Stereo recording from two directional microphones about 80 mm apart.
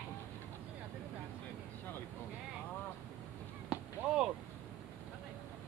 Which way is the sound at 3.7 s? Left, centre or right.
Centre.